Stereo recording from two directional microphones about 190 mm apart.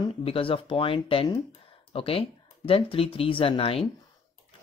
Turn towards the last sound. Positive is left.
turn(degrees=30)  # may be behind; listen again after turning